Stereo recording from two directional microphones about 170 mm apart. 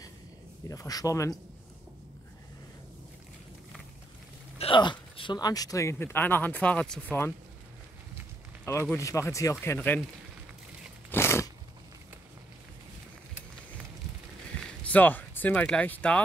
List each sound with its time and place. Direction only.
0.7 s speech: 20° left (ahead or behind)
4.6 s a sound: 30° left (ahead or behind)
5.1 s speech: 25° left (ahead or behind); by 7.3 s 10° left (ahead or behind)
8.9 s speech: 15° left (ahead or behind)
11.1 s a sound: 15° left (ahead or behind)
14.8 s speech: 10° left (ahead or behind)